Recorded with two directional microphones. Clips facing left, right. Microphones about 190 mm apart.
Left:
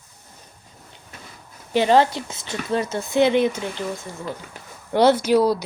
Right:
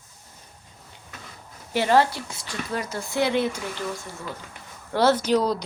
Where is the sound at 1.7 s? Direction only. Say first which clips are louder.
Left 3 dB; 20° left (ahead or behind).